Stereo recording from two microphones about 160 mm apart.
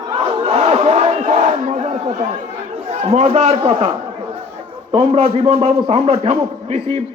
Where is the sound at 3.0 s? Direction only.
40° right (ahead or behind).